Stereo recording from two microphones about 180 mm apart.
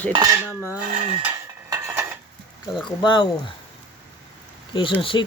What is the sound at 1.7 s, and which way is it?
Dishes, 15° right (ahead or behind).